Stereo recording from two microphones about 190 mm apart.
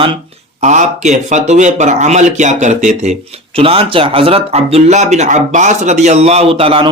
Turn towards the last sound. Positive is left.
turn(degrees=-30)  # may be behind; listen again after turning